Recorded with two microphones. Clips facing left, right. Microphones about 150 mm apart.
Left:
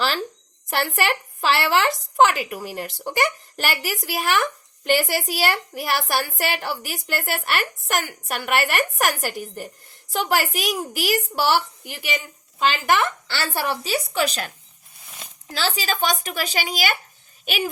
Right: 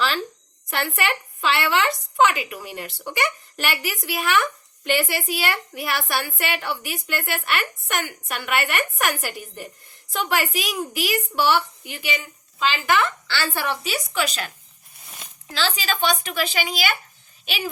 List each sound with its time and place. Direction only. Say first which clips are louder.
0.7 s a woman's voice: left 2 dB; 40° left (ahead or behind)